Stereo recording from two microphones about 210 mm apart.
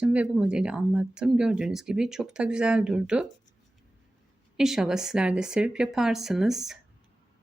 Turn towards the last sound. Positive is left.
turn(degrees=0)  # may be behind; listen again after turning